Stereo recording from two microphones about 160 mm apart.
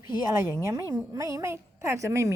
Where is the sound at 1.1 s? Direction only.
20° right (ahead or behind).